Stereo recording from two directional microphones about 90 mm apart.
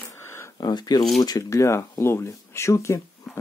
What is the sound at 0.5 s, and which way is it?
Speech, 50° left (ahead or behind).